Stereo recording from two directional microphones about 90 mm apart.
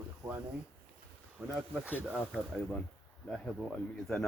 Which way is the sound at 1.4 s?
10° left (ahead or behind).